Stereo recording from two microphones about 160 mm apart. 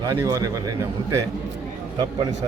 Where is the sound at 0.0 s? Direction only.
25° right (ahead or behind).